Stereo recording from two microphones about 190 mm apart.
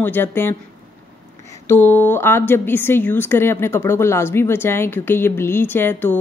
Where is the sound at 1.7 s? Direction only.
10° left (ahead or behind).